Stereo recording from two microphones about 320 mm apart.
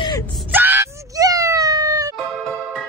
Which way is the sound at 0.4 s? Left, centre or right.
Centre.